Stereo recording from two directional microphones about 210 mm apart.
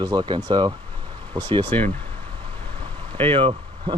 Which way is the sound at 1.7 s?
10° left (ahead or behind).